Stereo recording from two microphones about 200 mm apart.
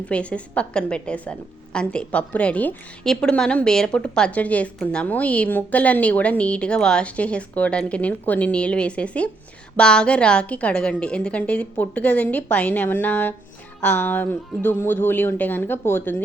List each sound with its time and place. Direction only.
0.1 s a woman's voice: 5° left (ahead or behind)